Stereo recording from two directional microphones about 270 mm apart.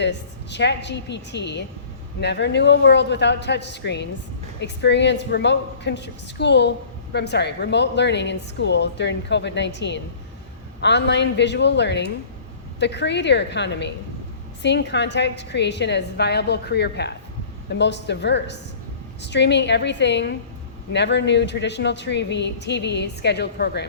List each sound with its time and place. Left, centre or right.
0.0 s a woman's voice: left